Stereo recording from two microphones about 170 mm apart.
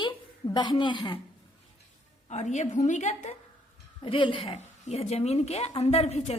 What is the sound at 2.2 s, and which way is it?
A woman's voice, 45° left (ahead or behind).